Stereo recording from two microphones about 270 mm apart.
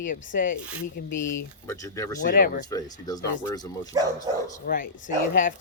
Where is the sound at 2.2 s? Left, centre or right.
Left.